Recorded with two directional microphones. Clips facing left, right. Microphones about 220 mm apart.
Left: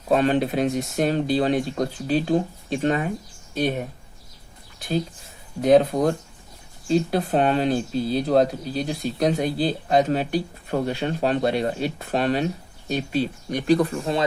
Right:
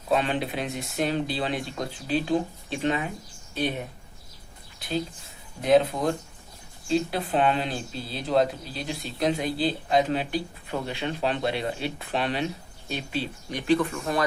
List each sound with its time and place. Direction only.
0.1 s speech: 45° left (ahead or behind)
5.6 s speech: 45° left (ahead or behind); by 14.3 s 30° left (ahead or behind)